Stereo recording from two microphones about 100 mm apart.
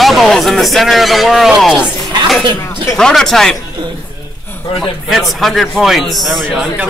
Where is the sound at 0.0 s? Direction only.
Centre (ahead or behind).